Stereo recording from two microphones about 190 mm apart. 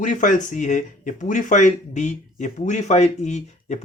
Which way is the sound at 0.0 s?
40° left (ahead or behind).